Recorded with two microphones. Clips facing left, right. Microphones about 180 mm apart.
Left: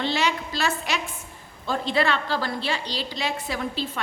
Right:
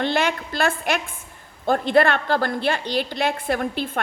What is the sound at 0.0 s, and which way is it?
A woman's voice, 55° right (ahead or behind).